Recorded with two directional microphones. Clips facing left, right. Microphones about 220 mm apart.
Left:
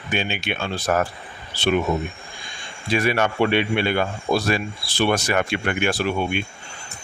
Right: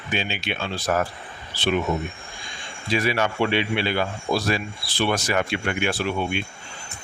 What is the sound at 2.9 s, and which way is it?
Speech, 55° left (ahead or behind).